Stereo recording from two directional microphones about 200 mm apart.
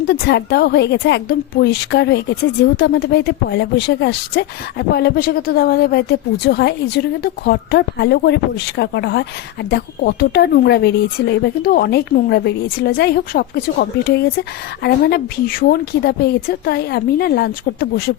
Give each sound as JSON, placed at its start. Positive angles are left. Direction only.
{"t": 0.1, "sound": "a woman's voice", "side_deg": 55}